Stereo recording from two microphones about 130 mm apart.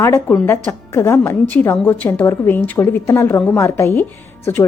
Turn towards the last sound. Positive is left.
turn(degrees=20)  # may be behind; listen again after turning